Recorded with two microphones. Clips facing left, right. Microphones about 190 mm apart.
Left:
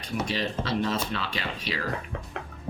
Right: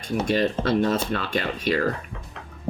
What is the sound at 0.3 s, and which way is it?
Speech, 50° right (ahead or behind).